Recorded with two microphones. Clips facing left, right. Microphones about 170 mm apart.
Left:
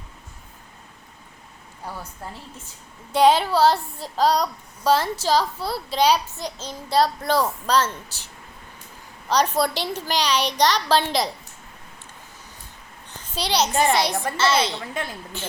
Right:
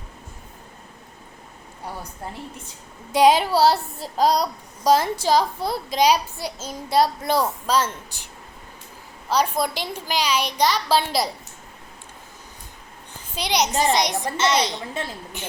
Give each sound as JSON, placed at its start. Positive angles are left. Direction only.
{"t": 3.1, "sound": "a child's voice", "side_deg": -10}
{"t": 9.3, "sound": "a child's voice", "side_deg": -10}
{"t": 13.3, "sound": "a child's voice", "side_deg": -15}
{"t": 15.0, "sound": "a woman's voice", "side_deg": -25}